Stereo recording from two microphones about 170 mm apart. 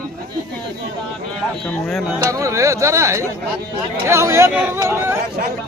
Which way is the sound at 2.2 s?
20° right (ahead or behind).